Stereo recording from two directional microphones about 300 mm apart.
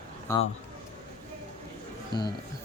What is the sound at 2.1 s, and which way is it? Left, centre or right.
Speech, centre.